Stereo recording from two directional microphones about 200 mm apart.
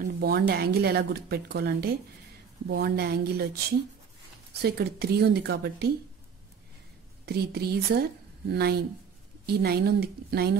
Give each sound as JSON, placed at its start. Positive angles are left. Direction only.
{"t": 0.0, "sound": "speech", "side_deg": -50}
{"t": 4.6, "sound": "speech", "side_deg": -50}
{"t": 7.2, "sound": "a woman's voice", "side_deg": -50}